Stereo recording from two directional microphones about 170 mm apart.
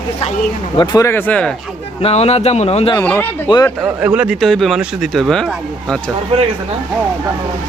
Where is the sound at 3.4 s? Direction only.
25° left (ahead or behind).